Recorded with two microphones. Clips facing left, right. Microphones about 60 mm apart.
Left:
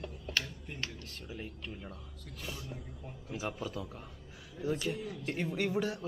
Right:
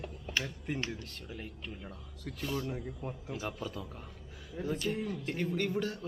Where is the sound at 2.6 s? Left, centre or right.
Right.